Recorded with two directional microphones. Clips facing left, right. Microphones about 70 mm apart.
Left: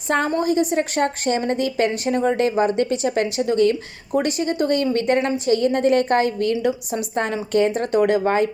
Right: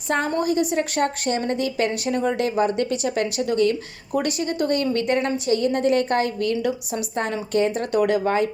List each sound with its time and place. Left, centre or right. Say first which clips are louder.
0.3 s a woman's voice: left 2 dB; left